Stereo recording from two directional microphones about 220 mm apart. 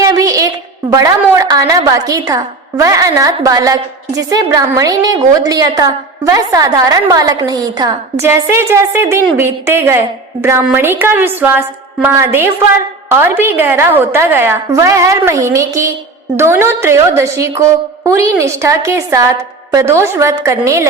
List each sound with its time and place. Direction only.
0.0 s a woman's voice: 15° right (ahead or behind)